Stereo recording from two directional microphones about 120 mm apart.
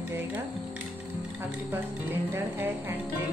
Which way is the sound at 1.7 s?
15° right (ahead or behind).